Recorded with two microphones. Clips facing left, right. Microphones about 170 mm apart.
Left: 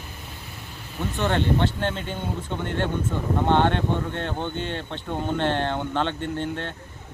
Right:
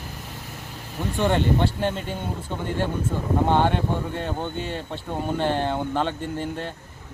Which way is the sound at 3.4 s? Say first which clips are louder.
Left 2 dB; 10° right (ahead or behind).